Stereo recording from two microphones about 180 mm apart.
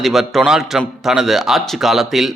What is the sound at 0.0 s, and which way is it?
A man's voice, centre (ahead or behind).